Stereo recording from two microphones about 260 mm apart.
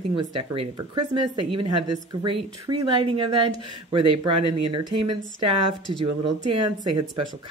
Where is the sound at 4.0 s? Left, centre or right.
Right.